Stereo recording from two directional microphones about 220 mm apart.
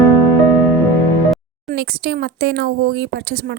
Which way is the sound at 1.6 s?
45° right (ahead or behind).